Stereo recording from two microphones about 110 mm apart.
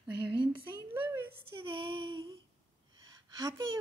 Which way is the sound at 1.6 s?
50° right (ahead or behind).